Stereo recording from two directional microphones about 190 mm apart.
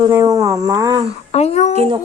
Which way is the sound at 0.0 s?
15° right (ahead or behind).